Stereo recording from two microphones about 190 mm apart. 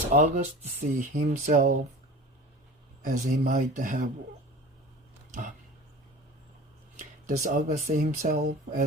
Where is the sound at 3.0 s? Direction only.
45° right (ahead or behind).